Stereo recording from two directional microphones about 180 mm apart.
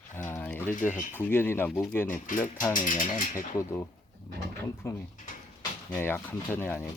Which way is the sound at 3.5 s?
15° left (ahead or behind).